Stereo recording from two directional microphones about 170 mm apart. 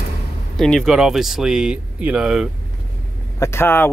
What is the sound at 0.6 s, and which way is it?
Speech, centre (ahead or behind).